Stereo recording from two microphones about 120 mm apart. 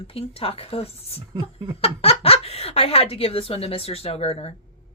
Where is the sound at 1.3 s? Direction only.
40° right (ahead or behind).